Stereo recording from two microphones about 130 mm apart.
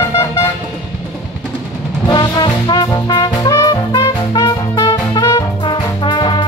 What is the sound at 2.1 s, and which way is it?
Music, 35° left (ahead or behind).